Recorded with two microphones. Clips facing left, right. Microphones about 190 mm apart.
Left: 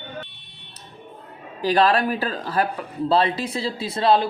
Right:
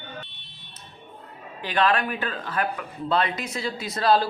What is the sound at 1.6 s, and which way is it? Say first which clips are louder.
Speech: left 5 dB; 35° left (ahead or behind).